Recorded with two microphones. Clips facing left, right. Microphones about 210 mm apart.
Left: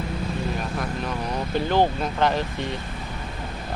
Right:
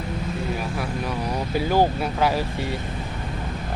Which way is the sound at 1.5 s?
10° right (ahead or behind).